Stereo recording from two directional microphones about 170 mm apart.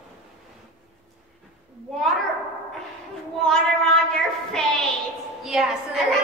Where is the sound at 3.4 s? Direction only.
5° left (ahead or behind).